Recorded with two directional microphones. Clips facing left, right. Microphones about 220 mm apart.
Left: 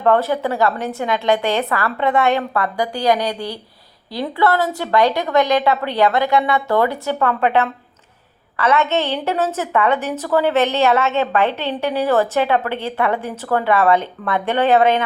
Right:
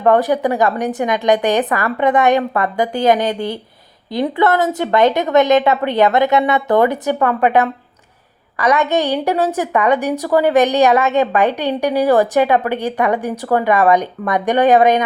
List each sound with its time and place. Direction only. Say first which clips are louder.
0.0 s a woman's voice: right 3 dB; 15° right (ahead or behind)